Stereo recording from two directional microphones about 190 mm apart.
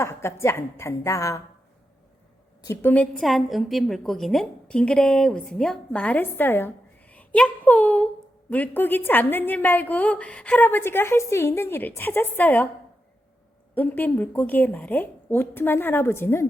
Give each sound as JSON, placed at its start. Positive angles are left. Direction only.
{"t": 0.0, "sound": "a woman's voice", "side_deg": 15}
{"t": 2.6, "sound": "a woman's voice", "side_deg": 10}
{"t": 13.7, "sound": "a woman's voice", "side_deg": 10}